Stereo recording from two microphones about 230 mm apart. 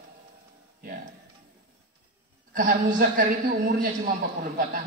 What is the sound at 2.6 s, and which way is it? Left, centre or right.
Speech, right.